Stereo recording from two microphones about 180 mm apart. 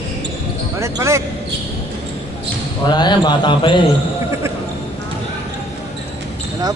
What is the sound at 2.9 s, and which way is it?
Speech, 25° left (ahead or behind).